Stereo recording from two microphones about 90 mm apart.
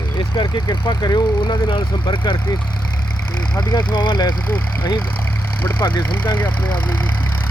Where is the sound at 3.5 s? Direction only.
55° left (ahead or behind).